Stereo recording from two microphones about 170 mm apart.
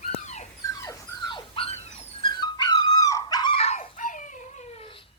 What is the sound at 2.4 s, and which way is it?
Dog, 25° left (ahead or behind).